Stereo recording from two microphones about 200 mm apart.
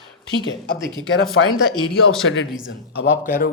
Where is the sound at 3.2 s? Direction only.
45° left (ahead or behind).